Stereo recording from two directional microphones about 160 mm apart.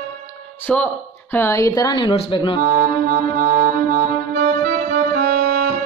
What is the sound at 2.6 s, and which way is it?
Music, 60° right (ahead or behind).